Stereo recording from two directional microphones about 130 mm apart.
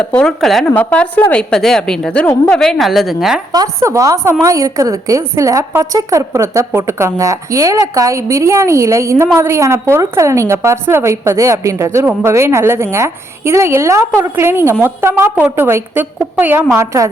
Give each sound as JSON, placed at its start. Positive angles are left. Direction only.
{"t": 0.0, "sound": "a woman's voice", "side_deg": 10}
{"t": 3.5, "sound": "a woman's voice", "side_deg": -25}